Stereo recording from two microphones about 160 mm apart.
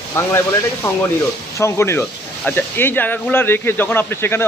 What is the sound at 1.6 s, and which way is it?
Speech, 15° left (ahead or behind).